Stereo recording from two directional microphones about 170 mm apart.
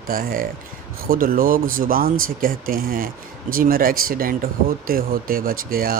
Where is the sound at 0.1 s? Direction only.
55° right (ahead or behind).